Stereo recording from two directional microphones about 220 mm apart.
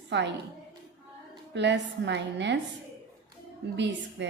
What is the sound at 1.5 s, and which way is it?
A woman's voice, 50° right (ahead or behind).